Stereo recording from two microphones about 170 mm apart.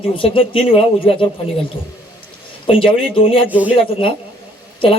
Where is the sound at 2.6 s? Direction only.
30° left (ahead or behind).